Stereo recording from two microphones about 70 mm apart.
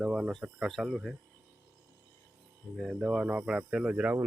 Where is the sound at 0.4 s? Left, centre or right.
Centre.